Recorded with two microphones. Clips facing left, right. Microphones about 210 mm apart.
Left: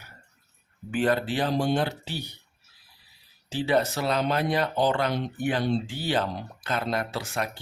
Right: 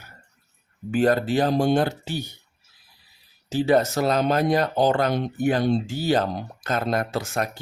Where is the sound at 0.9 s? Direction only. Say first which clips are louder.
Right 5 dB; 40° right (ahead or behind).